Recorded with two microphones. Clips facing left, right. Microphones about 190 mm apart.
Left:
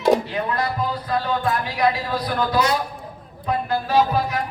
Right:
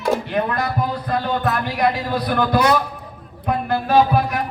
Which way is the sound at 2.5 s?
60° right (ahead or behind).